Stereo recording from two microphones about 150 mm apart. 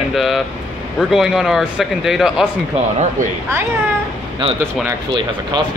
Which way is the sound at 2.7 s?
50° right (ahead or behind).